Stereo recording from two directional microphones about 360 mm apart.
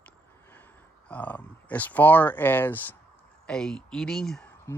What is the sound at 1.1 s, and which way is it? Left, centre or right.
Speech, centre.